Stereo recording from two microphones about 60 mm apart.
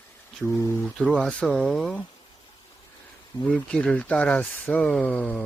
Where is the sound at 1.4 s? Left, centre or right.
Centre.